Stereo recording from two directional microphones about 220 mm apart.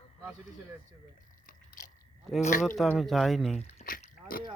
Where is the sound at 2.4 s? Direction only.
35° left (ahead or behind).